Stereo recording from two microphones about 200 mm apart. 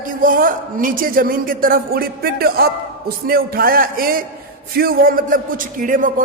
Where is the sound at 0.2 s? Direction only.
45° right (ahead or behind).